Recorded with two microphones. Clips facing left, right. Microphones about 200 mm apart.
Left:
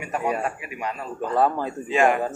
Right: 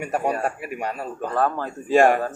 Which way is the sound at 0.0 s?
45° right (ahead or behind).